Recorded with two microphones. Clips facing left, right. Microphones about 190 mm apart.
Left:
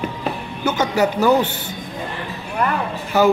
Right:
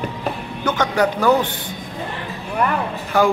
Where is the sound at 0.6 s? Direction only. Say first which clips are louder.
Even; 5° left (ahead or behind).